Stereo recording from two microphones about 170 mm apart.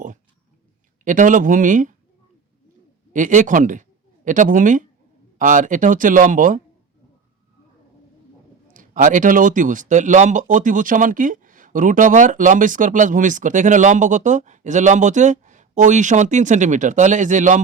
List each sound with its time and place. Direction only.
1.0 s speech: 50° right (ahead or behind)
3.1 s speech: 50° right (ahead or behind)
8.7 s speech: 50° right (ahead or behind)